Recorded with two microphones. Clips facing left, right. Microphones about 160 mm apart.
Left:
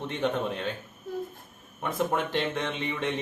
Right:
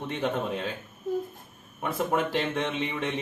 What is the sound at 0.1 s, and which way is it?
Speech, 5° right (ahead or behind).